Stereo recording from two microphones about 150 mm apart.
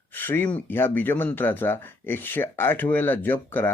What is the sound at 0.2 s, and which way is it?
Speech, 15° left (ahead or behind).